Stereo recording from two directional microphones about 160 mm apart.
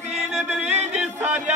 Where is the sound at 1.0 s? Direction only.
10° right (ahead or behind).